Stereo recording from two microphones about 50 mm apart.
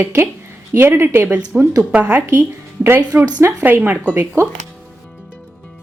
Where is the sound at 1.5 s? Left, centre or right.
Right.